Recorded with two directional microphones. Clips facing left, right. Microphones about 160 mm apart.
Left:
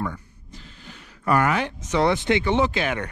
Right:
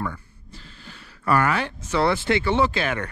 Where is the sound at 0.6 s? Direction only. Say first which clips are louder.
Left 1 dB; 15° left (ahead or behind).